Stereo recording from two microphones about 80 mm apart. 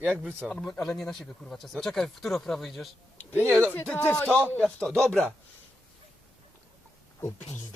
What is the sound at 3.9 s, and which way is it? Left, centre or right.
Speech, centre.